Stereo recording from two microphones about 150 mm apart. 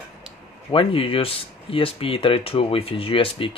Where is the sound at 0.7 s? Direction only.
35° left (ahead or behind).